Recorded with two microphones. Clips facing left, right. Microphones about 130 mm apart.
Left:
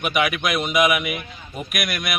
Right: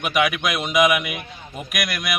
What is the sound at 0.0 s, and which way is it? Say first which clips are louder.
A man's voice: right 1 dB; centre (ahead or behind).